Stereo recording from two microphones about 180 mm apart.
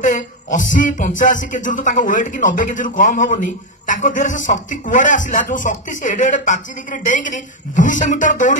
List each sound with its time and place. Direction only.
0.0 s speech: 45° left (ahead or behind)